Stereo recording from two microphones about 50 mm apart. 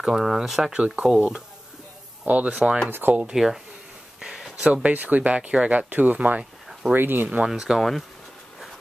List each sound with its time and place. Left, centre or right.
0.0 s speech: centre
0.7 s speech: right
2.2 s speech: right
2.9 s speech: right
3.3 s speech: centre
4.2 s a sound: centre
4.8 s speech: right
6.9 s speech: right
7.2 s speech: centre